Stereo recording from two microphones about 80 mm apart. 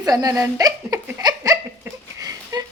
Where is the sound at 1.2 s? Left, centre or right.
Right.